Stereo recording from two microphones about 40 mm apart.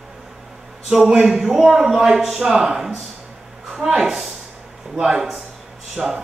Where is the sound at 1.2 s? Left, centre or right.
Centre.